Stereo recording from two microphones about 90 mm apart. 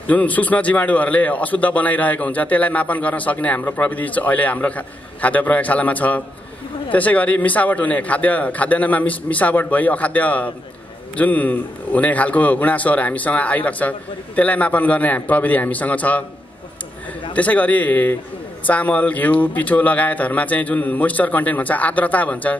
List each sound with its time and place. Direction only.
0.0 s a man's voice: 15° left (ahead or behind)
17.3 s a man's voice: 15° left (ahead or behind)